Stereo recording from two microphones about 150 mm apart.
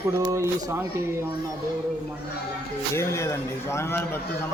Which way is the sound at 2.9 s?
20° left (ahead or behind).